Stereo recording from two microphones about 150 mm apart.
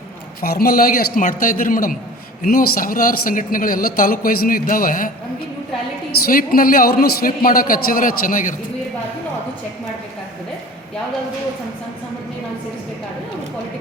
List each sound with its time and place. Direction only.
0.4 s a man's voice: 85° left; by 5.1 s 65° left (ahead or behind)
6.2 s speech: 75° left (ahead or behind)